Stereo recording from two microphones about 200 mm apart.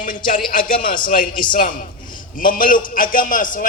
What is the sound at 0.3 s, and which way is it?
A man's voice, 40° left (ahead or behind).